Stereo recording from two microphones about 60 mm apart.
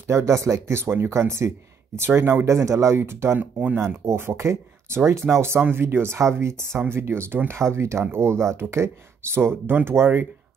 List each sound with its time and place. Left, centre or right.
0.0 s speech: right
0.7 s speech: right
2.4 s speech: right
3.0 s speech: right
3.3 s speech: right
4.0 s speech: right